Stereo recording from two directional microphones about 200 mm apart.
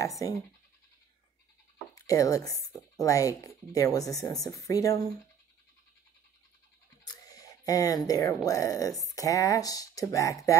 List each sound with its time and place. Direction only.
0.0 s speech: 15° left (ahead or behind)
2.0 s speech: 15° left (ahead or behind)
7.1 s a sound: 20° left (ahead or behind)
8.5 s speech: 15° left (ahead or behind)